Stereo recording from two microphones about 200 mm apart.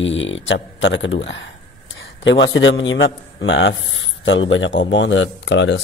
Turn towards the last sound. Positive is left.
turn(degrees=65)  # may be behind; listen again after turning